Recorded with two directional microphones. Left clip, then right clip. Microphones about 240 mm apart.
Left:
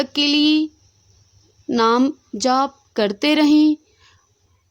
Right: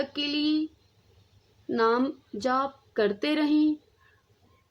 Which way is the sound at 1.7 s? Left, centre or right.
Left.